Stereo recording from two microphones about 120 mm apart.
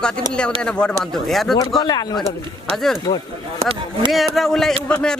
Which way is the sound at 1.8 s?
35° left (ahead or behind).